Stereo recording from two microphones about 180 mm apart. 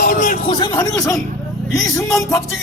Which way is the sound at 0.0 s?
50° left (ahead or behind).